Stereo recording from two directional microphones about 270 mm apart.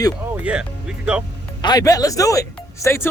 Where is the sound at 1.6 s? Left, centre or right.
Centre.